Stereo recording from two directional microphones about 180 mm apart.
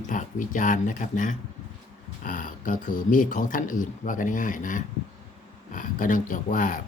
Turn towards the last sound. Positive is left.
turn(degrees=45)  # may be behind; listen again after turning